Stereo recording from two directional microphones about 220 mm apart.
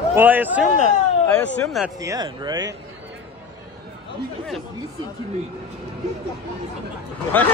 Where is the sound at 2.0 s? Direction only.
15° right (ahead or behind).